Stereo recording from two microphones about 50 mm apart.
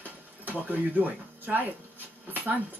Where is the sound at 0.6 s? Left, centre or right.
Right.